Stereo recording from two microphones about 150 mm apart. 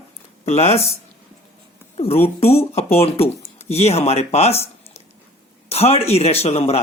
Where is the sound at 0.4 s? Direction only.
45° left (ahead or behind).